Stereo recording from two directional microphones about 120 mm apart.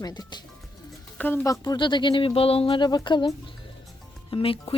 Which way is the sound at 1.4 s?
30° left (ahead or behind).